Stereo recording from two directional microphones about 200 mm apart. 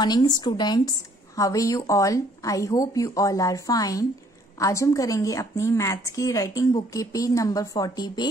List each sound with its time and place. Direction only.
0.0 s a woman's voice: 20° left (ahead or behind)